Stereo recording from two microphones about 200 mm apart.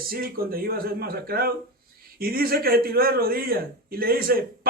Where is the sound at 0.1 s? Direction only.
45° right (ahead or behind).